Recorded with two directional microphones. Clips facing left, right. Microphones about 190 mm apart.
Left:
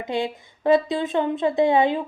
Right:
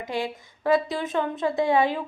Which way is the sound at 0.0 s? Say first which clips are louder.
Left 3 dB; 20° left (ahead or behind).